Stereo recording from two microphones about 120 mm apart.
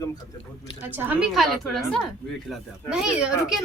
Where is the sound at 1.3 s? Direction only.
Centre (ahead or behind).